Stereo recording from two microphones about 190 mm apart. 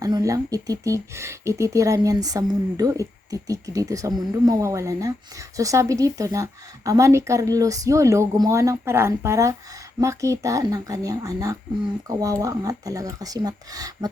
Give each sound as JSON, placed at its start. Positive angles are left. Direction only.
{"t": 0.0, "sound": "a woman's voice", "side_deg": -20}